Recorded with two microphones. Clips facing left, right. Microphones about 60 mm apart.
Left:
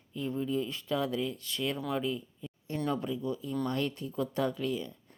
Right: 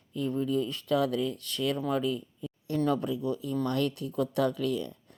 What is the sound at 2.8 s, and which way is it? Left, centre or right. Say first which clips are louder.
Speech: right 3 dB; right.